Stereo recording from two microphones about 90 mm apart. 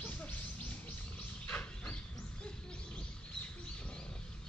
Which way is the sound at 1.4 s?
15° left (ahead or behind).